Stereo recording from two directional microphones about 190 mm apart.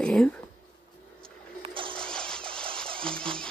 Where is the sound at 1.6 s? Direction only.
25° right (ahead or behind).